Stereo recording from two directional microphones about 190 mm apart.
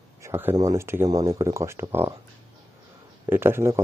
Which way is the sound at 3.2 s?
10° right (ahead or behind).